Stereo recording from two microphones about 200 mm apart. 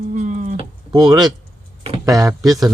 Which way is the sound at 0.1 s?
40° right (ahead or behind).